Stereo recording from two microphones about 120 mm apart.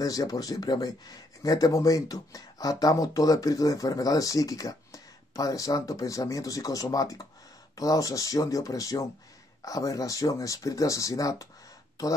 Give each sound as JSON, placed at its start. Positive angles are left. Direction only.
{"t": 0.0, "sound": "speech", "side_deg": 30}